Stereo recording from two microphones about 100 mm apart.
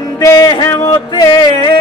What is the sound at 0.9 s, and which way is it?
Speech, 45° left (ahead or behind).